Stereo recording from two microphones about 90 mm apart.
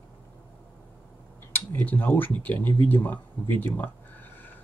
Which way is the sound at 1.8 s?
20° left (ahead or behind).